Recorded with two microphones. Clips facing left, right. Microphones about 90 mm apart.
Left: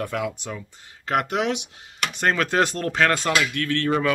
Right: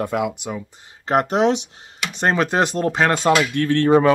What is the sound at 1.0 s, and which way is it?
Speech, 30° right (ahead or behind).